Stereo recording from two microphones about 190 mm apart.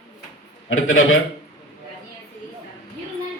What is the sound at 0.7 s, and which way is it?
Speech, 90° left.